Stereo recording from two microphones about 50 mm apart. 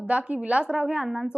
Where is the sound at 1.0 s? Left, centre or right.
Centre.